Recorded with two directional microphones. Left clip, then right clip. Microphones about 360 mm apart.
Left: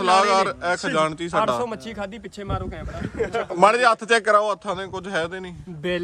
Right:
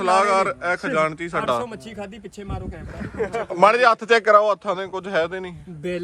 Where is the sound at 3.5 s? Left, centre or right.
Centre.